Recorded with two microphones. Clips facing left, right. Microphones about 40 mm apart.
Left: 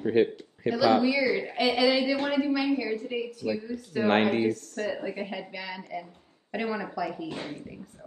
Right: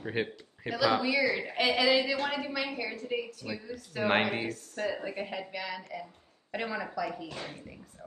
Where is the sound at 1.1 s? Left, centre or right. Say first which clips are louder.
Left 2 dB; right.